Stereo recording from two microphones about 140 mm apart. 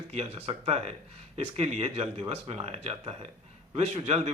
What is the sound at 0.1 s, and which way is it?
Speech, 45° right (ahead or behind).